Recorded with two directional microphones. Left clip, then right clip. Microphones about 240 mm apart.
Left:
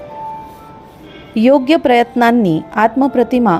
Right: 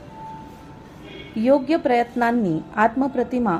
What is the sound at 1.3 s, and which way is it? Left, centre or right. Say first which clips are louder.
Speech: left 8 dB; left.